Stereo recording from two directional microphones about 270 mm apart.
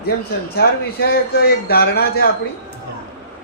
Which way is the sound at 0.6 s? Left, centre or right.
Left.